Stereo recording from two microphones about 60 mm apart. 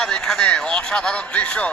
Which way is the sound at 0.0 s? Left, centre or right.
Centre.